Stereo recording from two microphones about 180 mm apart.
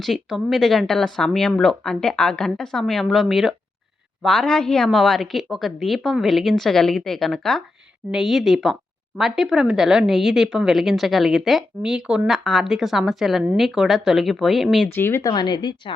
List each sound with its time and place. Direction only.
0.0 s a woman's voice: centre (ahead or behind)
14.9 s speech: 15° left (ahead or behind)
15.3 s a woman's voice: 25° left (ahead or behind)